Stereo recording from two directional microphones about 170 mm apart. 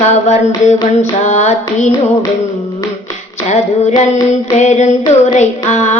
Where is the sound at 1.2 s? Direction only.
45° left (ahead or behind).